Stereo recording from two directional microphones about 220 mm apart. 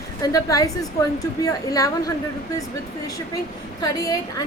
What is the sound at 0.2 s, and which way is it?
A woman's voice, 15° left (ahead or behind).